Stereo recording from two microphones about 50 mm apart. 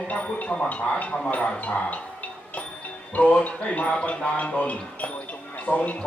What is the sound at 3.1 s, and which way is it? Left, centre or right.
Speech, left.